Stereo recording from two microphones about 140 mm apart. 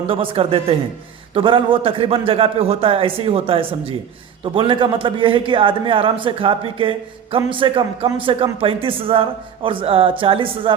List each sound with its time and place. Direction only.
0.1 s a man's voice: 40° right (ahead or behind)